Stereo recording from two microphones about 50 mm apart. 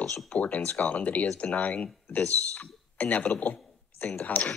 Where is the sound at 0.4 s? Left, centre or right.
Left.